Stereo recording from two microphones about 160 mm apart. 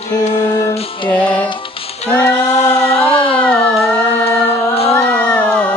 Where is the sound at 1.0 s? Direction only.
10° left (ahead or behind).